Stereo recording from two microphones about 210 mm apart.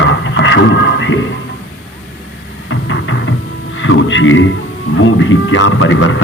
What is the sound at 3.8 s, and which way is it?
Speech, 65° left (ahead or behind).